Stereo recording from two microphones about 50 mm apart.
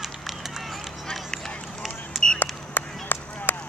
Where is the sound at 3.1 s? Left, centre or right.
Left.